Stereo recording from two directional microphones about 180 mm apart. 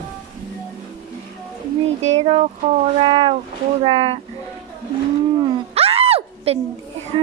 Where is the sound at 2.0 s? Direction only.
35° right (ahead or behind).